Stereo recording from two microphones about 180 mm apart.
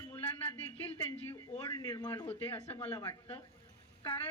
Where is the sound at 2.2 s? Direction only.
30° left (ahead or behind).